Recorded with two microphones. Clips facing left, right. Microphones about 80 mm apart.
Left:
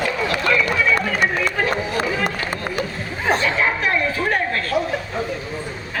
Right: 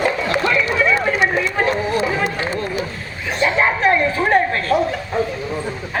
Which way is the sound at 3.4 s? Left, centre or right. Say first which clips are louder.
Right 4 dB; right.